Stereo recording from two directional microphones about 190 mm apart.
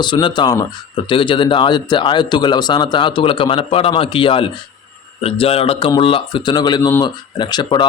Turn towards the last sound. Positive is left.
turn(degrees=20)  # may be behind; listen again after turning